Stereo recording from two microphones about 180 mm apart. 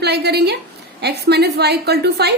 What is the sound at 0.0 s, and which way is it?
A woman's voice, 65° right (ahead or behind).